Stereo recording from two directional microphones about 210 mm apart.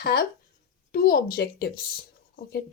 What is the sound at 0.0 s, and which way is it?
Speech, 45° left (ahead or behind).